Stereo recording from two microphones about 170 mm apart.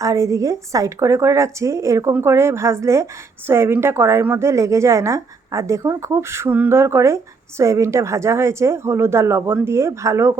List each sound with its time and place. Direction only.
0.0 s speech: 20° right (ahead or behind)